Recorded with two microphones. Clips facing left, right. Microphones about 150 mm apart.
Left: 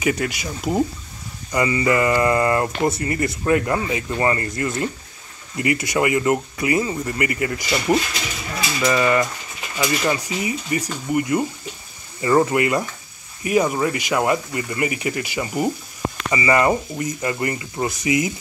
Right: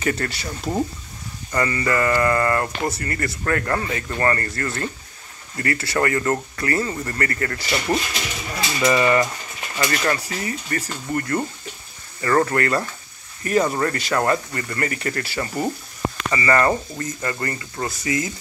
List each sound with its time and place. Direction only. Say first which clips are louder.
0.0 s speech: left 2 dB; 10° left (ahead or behind)
8.8 s mechanisms: right 1 dB; centre (ahead or behind)
9.8 s speech: left 1 dB; 10° left (ahead or behind)